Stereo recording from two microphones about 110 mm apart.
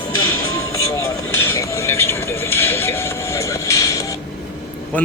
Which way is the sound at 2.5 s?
20° left (ahead or behind).